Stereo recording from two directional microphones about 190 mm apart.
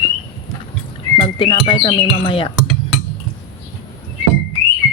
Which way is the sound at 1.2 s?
25° left (ahead or behind).